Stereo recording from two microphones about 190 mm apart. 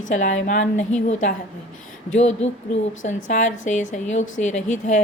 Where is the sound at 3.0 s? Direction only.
40° left (ahead or behind).